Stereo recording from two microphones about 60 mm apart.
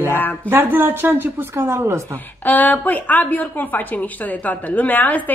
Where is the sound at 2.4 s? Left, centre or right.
Left.